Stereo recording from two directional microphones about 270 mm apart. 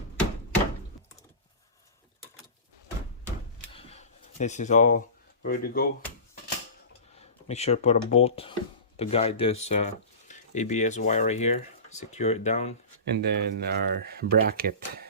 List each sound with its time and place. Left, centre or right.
3.7 s a sound: left
7.2 s speech: left
13.1 s speech: right